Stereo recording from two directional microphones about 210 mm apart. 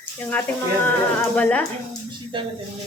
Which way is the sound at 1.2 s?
10° left (ahead or behind).